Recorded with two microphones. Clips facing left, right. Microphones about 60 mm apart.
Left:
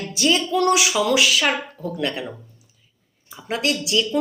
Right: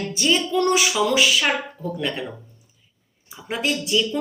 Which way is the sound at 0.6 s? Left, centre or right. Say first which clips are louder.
Left 3 dB; centre.